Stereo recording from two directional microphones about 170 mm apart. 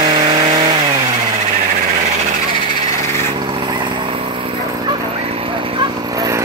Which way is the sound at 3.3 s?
30° right (ahead or behind).